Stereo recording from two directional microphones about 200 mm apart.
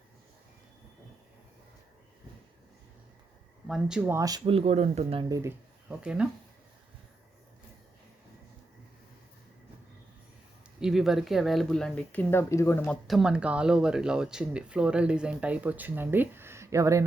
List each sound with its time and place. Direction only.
3.7 s speech: 5° right (ahead or behind); by 5.2 s 30° right (ahead or behind)
5.3 s speech: 10° right (ahead or behind)
10.8 s speech: centre (ahead or behind)